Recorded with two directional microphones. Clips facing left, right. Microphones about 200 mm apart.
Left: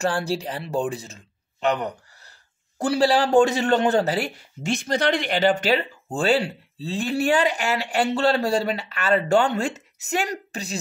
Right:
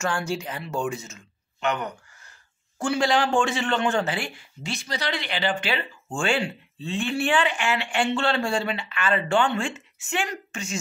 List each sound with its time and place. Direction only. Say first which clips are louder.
0.0 s a man's voice: left 3 dB; 35° left (ahead or behind)